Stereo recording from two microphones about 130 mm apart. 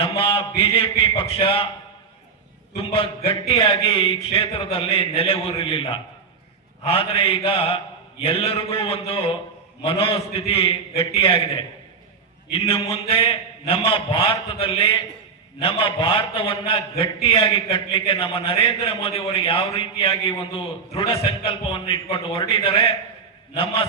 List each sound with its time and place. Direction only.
0.0 s a man's voice: 45° left (ahead or behind)
2.7 s a man's voice: 45° left (ahead or behind)